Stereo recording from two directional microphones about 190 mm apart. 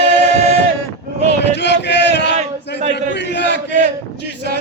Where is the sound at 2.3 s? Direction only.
35° right (ahead or behind).